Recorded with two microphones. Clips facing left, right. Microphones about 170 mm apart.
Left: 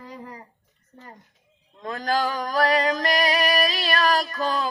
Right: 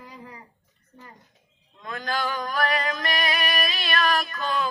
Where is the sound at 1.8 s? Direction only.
35° left (ahead or behind).